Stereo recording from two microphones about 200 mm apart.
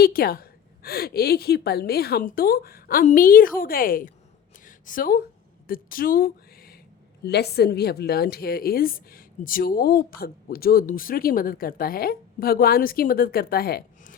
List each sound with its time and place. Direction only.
0.0 s a woman's voice: 45° left (ahead or behind)
4.6 s a sound: 45° left (ahead or behind)
5.6 s a woman's voice: 45° left (ahead or behind)